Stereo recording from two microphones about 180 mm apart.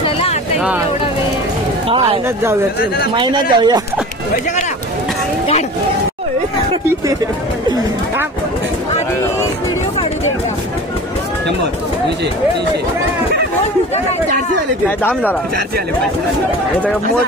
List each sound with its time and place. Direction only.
0.0 s a sound: 35° left (ahead or behind)
1.9 s a man's voice: 30° right (ahead or behind)
3.2 s a man's voice: 25° right (ahead or behind)